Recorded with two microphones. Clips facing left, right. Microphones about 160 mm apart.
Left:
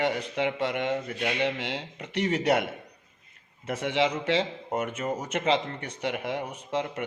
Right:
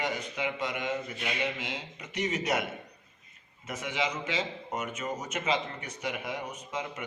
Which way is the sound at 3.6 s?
60° left (ahead or behind).